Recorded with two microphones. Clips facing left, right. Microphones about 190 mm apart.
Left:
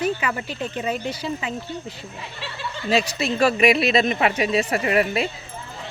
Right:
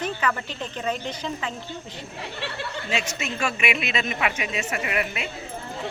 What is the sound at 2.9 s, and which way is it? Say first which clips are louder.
A woman's voice: left 9 dB; 35° left (ahead or behind).